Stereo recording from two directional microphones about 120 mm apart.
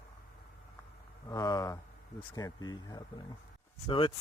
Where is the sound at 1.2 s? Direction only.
30° left (ahead or behind).